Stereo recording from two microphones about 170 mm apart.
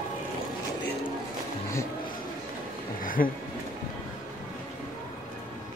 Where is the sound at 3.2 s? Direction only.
55° left (ahead or behind).